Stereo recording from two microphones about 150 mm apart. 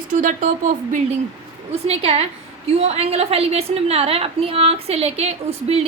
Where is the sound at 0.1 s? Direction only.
65° right (ahead or behind).